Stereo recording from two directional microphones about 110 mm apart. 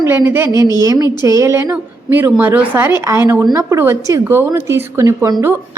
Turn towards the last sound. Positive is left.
turn(degrees=-35)  # may be behind; listen again after turning